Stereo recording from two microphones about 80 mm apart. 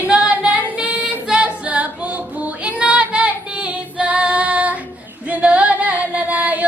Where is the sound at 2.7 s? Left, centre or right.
Centre.